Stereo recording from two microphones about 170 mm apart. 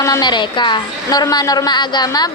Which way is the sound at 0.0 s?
25° left (ahead or behind).